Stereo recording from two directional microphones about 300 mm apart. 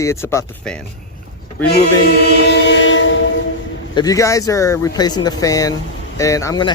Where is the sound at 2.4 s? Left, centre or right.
Left.